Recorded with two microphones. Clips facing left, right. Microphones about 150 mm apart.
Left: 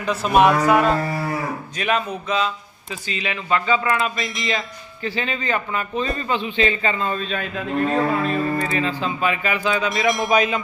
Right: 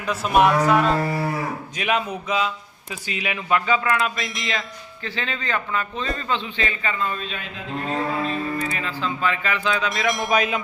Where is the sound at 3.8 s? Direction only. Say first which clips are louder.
Left 1 dB; centre (ahead or behind).